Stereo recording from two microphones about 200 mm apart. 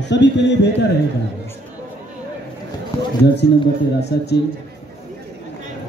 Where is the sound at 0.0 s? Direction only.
60° left (ahead or behind).